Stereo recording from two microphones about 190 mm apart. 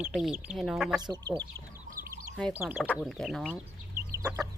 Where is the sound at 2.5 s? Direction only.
10° right (ahead or behind).